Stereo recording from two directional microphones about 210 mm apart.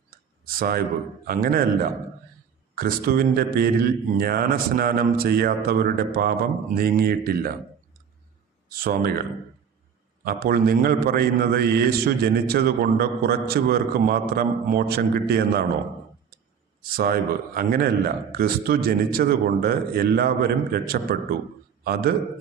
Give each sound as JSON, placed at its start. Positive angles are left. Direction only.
{"t": 0.1, "sound": "a sound", "side_deg": -45}
{"t": 1.2, "sound": "a man's voice", "side_deg": -45}
{"t": 8.7, "sound": "a man's voice", "side_deg": -45}
{"t": 10.2, "sound": "a man's voice", "side_deg": -45}
{"t": 16.9, "sound": "a man's voice", "side_deg": -45}